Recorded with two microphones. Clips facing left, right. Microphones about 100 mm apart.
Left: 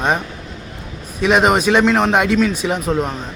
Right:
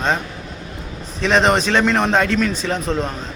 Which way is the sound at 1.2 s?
10° left (ahead or behind).